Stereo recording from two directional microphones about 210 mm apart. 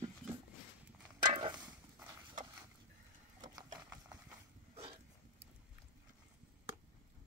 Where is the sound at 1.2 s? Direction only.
20° right (ahead or behind).